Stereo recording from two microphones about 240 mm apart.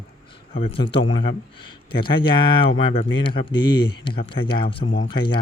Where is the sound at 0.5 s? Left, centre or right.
Left.